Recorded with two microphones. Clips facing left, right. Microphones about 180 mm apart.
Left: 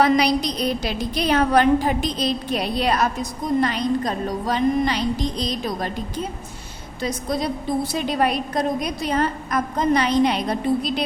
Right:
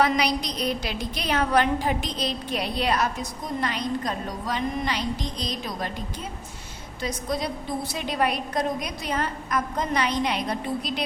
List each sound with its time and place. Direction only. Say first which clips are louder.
0.0 s a woman's voice: left 5 dB; 35° left (ahead or behind)
7.0 s a woman's voice: left 4 dB; 35° left (ahead or behind)